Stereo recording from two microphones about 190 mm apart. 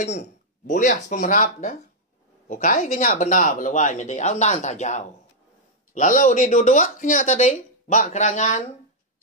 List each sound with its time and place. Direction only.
0.7 s speech: 45° left (ahead or behind)